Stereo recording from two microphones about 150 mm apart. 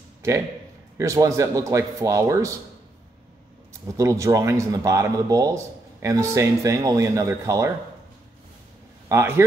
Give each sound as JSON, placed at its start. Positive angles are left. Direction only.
{"t": 0.9, "sound": "speech", "side_deg": -20}
{"t": 3.8, "sound": "speech", "side_deg": -20}
{"t": 9.1, "sound": "a man's voice", "side_deg": -15}